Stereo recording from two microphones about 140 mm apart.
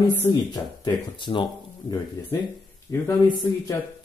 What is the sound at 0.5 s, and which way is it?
Speech, 30° left (ahead or behind).